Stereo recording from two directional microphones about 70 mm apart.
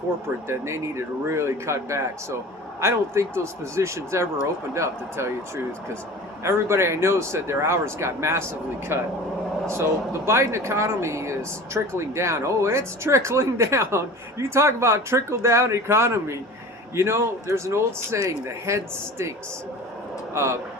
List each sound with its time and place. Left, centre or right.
0.4 s speech: right
6.4 s speech: right
20.3 s speech: right